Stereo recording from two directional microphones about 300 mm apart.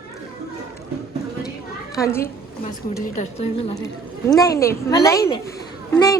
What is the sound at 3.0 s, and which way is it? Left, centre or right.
A woman's voice, left.